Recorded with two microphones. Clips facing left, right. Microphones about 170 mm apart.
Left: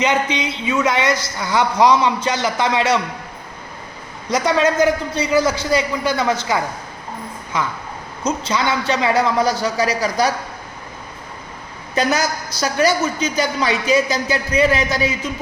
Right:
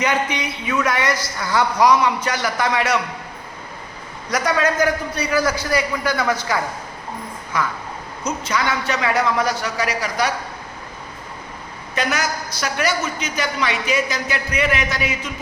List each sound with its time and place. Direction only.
0.0 s a woman's voice: 20° left (ahead or behind)
4.3 s a woman's voice: 25° left (ahead or behind)
11.9 s a woman's voice: 35° left (ahead or behind)